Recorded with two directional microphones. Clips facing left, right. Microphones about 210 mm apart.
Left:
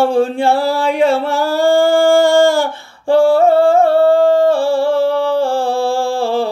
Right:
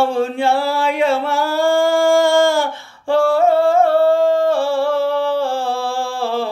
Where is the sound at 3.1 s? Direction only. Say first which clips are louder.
Left 4 dB; 30° left (ahead or behind).